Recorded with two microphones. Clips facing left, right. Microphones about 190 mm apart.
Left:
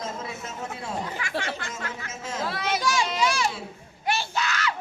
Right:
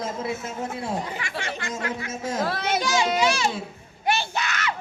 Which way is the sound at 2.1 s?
40° right (ahead or behind).